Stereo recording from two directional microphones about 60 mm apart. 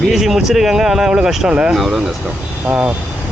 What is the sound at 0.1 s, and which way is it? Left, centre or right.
Speech, centre.